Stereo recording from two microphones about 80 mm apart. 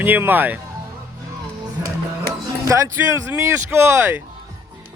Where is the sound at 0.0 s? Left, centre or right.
Right.